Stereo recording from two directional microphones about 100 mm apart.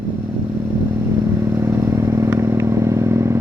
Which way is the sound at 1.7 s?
25° right (ahead or behind).